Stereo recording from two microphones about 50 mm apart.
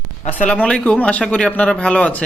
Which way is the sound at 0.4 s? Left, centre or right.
Centre.